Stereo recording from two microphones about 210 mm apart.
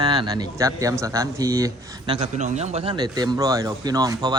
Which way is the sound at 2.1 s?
30° right (ahead or behind).